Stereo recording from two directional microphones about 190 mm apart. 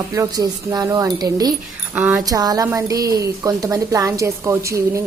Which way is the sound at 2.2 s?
20° right (ahead or behind).